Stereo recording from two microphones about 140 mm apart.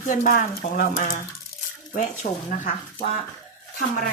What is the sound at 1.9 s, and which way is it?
Speech, 70° left (ahead or behind).